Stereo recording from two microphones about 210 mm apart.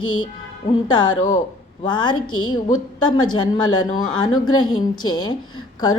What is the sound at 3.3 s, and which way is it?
Speech, 20° left (ahead or behind).